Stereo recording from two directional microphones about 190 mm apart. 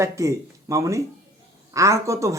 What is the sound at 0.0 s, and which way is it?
Speech, 15° right (ahead or behind).